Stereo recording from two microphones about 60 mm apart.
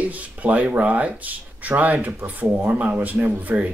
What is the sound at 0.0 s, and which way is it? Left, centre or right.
Speech, right.